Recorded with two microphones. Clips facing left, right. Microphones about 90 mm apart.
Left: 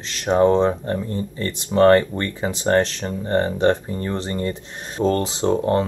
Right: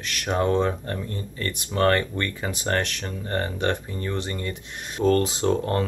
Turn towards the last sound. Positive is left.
turn(degrees=20)  # may be behind; listen again after turning